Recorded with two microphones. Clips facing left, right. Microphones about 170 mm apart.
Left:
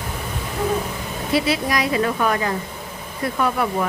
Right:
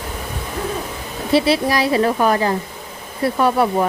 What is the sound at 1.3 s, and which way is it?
A woman's voice, 30° right (ahead or behind).